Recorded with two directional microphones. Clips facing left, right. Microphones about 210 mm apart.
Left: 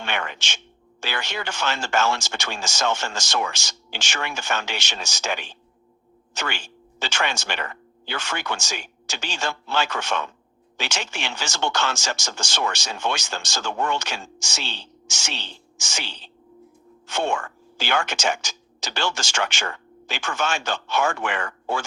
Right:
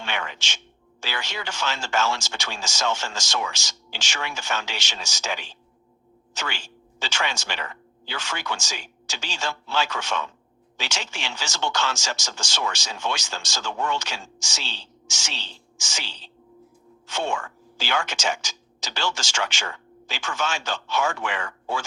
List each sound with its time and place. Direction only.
0.0 s speech: 55° left (ahead or behind)